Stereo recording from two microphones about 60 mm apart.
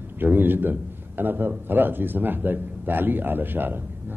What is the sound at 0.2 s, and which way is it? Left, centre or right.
Speech, right.